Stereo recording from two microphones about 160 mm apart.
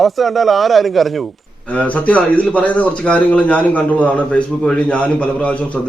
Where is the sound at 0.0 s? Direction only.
Centre (ahead or behind).